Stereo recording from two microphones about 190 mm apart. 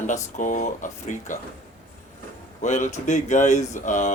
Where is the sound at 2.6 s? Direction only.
40° left (ahead or behind).